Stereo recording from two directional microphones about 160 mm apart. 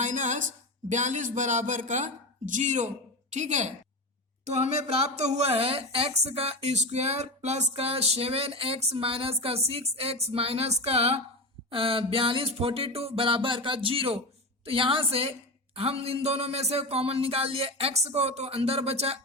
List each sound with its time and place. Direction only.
0.0 s a man's voice: 50° right (ahead or behind)